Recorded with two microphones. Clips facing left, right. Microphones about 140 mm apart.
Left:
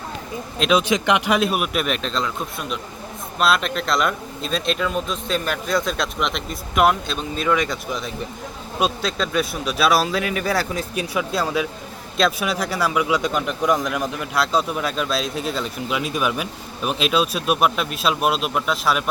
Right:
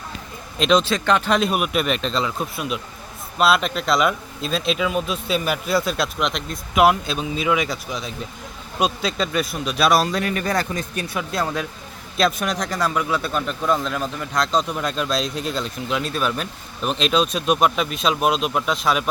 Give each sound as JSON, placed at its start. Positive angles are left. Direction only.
{"t": 0.6, "sound": "speech", "side_deg": 10}
{"t": 1.4, "sound": "speech", "side_deg": 0}